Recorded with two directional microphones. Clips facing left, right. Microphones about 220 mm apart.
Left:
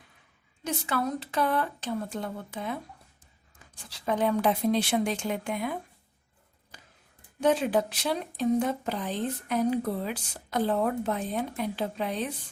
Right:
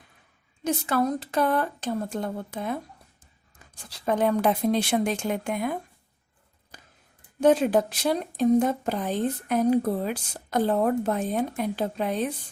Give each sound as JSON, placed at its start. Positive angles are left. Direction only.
{"t": 0.6, "sound": "speech", "side_deg": -40}
{"t": 3.8, "sound": "speech", "side_deg": -45}
{"t": 7.4, "sound": "speech", "side_deg": -45}